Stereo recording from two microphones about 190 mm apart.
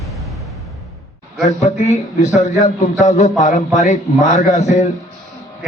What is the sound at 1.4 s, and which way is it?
A man's voice, 40° left (ahead or behind).